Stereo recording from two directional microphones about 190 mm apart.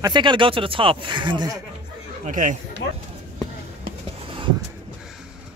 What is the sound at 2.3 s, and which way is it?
Speech, 45° right (ahead or behind).